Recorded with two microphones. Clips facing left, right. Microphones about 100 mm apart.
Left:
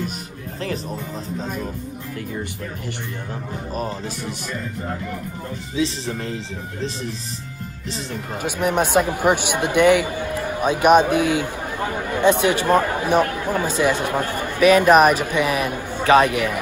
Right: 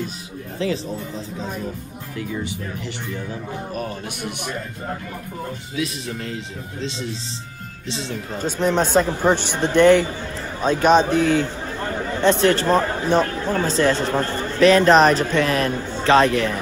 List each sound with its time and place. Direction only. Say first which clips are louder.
5.8 s speech: left 4 dB; 30° left (ahead or behind)
8.4 s a man's voice: right 1 dB; 10° left (ahead or behind)
10.1 s a sound: left 5 dB; 55° left (ahead or behind)
10.6 s a man's voice: left 1 dB; 10° left (ahead or behind)